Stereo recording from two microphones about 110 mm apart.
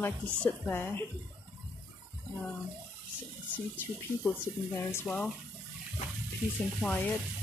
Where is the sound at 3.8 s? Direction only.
20° left (ahead or behind).